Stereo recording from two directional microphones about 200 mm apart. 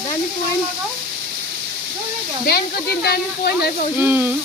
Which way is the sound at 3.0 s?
50° left (ahead or behind).